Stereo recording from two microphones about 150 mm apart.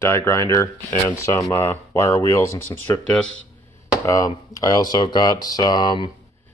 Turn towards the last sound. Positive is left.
turn(degrees=30)  # may be behind; listen again after turning